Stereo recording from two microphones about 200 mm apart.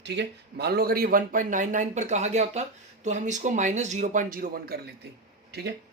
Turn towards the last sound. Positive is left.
turn(degrees=-55)  # may be behind; listen again after turning